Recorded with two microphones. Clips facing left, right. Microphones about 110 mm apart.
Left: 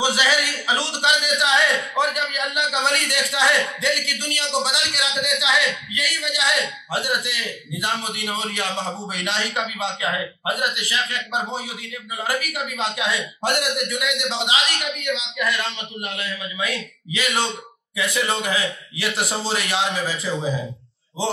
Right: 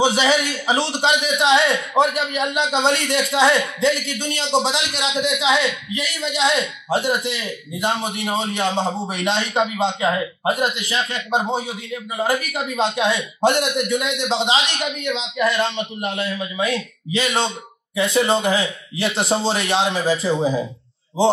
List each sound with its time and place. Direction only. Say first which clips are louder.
0.0 s a man's voice: right 4 dB; 30° right (ahead or behind)